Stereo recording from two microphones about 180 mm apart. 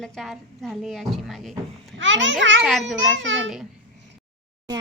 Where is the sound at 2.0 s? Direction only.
90° right.